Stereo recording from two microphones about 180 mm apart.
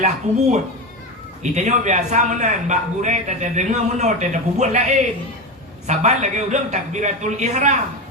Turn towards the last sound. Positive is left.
turn(degrees=-40)  # may be behind; listen again after turning